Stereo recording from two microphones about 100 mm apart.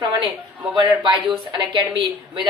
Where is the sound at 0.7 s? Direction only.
50° right (ahead or behind).